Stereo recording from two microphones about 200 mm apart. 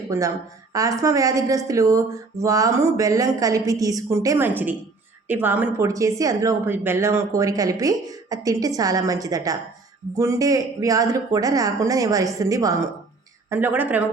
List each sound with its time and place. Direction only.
0.1 s a woman's voice: 15° right (ahead or behind)